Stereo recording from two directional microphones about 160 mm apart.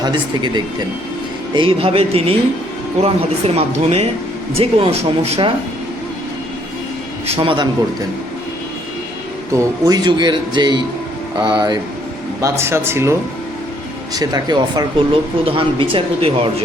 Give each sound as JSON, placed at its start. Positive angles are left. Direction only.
{"t": 0.0, "sound": "speech", "side_deg": -30}
{"t": 7.3, "sound": "speech", "side_deg": -30}
{"t": 9.5, "sound": "speech", "side_deg": -25}
{"t": 12.4, "sound": "speech", "side_deg": -15}